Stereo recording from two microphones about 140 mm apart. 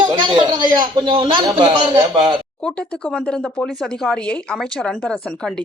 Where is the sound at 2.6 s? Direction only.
5° left (ahead or behind).